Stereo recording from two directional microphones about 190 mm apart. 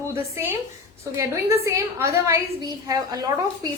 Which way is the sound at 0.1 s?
15° right (ahead or behind).